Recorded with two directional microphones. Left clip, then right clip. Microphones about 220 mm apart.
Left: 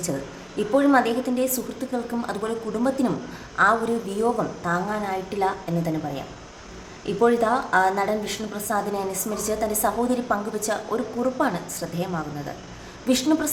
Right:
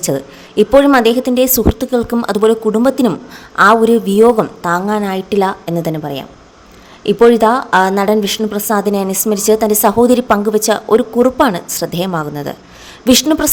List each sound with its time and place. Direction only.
0.5 s a woman's voice: 45° right (ahead or behind)